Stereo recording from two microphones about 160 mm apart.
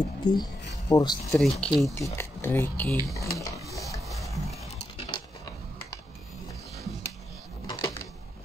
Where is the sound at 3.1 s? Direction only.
20° left (ahead or behind).